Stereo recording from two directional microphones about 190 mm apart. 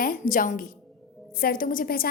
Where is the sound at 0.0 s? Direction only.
45° left (ahead or behind).